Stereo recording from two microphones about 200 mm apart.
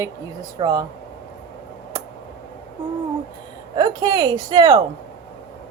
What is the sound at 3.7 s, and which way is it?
A woman's voice, 20° right (ahead or behind).